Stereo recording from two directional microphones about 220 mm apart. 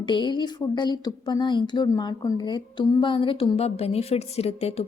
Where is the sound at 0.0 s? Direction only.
20° left (ahead or behind).